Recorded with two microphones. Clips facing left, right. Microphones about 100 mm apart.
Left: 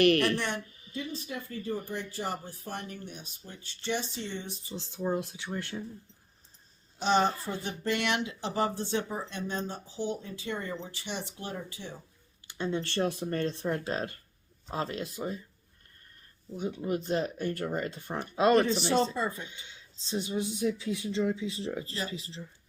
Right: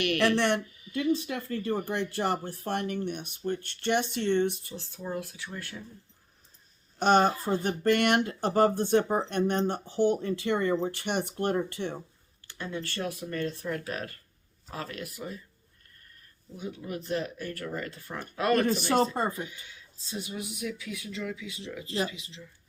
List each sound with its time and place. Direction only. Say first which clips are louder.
0.2 s speech: right 5 dB; 80° right
0.9 s a sound: right 6 dB; 30° left (ahead or behind)
1.2 s speech: right 5 dB; 70° right (ahead or behind)
4.7 s speech: left 4 dB; 20° left (ahead or behind)
7.0 s speech: right 4 dB; 55° right (ahead or behind)
7.4 s speech: right 7 dB; 45° right (ahead or behind); by 11.9 s 65° right (ahead or behind)
12.5 s speech: left 4 dB; 20° left (ahead or behind)
16.6 s speech: left 5 dB; 25° left (ahead or behind)
18.7 s speech: right 2 dB; 50° right (ahead or behind)
19.5 s speech: right 1 dB; 25° left (ahead or behind)